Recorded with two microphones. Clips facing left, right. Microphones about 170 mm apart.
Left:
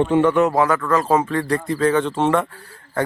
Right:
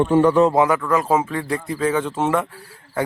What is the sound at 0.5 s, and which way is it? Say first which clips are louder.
Speech: even; 15° right (ahead or behind).